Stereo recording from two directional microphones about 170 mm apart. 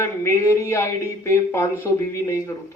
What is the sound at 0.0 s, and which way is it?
Speech, 15° left (ahead or behind).